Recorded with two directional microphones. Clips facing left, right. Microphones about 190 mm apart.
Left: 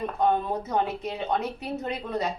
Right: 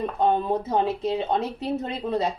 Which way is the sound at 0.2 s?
30° right (ahead or behind).